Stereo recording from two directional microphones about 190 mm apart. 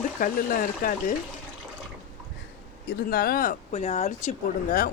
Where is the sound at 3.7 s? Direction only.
35° left (ahead or behind).